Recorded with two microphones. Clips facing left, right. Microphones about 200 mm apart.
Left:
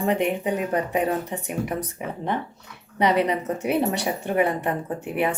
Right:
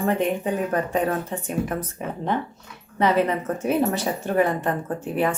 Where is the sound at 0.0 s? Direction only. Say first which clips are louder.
Even; 15° left (ahead or behind).